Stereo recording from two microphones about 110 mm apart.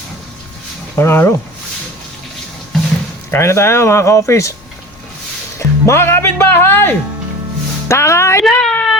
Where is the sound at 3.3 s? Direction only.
25° left (ahead or behind).